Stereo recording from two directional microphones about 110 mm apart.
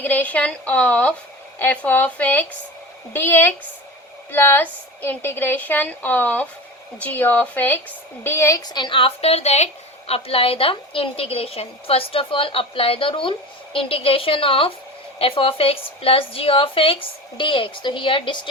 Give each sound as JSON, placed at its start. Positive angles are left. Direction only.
{"t": 0.0, "sound": "a woman's voice", "side_deg": 15}
{"t": 10.1, "sound": "a woman's voice", "side_deg": 60}